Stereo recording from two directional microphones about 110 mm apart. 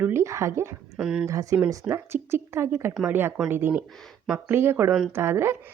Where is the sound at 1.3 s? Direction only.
30° right (ahead or behind).